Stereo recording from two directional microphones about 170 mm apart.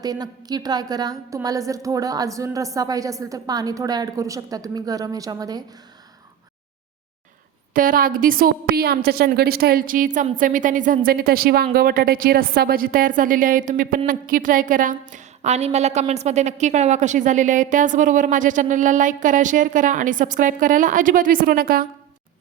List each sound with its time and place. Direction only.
0.0 s a woman's voice: 20° right (ahead or behind)
7.7 s a woman's voice: 55° right (ahead or behind)